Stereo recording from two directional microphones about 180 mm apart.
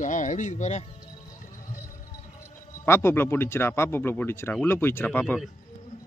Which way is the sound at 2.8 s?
15° left (ahead or behind).